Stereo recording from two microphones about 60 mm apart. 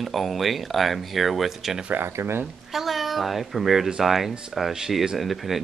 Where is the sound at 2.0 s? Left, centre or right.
Right.